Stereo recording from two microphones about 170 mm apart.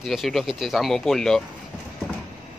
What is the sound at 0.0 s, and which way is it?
Speech, centre (ahead or behind).